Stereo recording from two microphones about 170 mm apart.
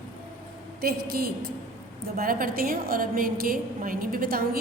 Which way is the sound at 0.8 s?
60° right (ahead or behind).